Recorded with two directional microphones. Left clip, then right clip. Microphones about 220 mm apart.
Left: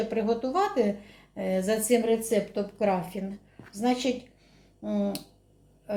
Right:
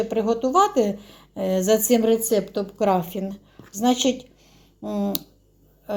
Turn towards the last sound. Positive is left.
turn(degrees=-30)  # may be behind; listen again after turning